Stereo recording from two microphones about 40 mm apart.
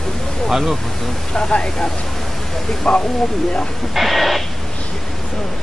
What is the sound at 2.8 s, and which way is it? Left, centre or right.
Speech, left.